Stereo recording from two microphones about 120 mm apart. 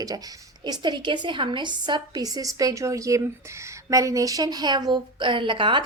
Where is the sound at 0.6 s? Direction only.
40° right (ahead or behind).